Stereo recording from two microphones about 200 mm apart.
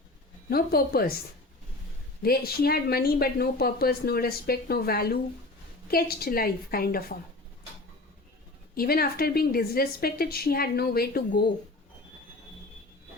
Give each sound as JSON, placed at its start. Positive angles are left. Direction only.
{"t": 0.5, "sound": "speech", "side_deg": 50}
{"t": 2.2, "sound": "speech", "side_deg": 50}
{"t": 8.7, "sound": "speech", "side_deg": 50}